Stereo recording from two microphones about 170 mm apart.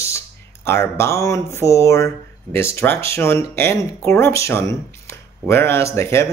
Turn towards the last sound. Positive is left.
turn(degrees=15)  # may be behind; listen again after turning